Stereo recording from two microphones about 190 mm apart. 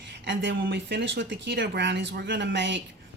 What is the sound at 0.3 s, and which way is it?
A woman's voice, 65° right (ahead or behind).